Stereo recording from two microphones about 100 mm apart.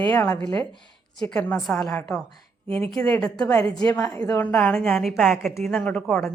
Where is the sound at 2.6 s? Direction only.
60° right (ahead or behind).